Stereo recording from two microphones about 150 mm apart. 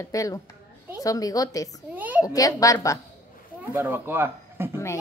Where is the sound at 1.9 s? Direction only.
10° right (ahead or behind).